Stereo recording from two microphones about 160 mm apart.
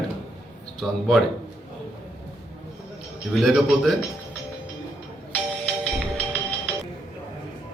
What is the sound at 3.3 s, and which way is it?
Speech, centre (ahead or behind).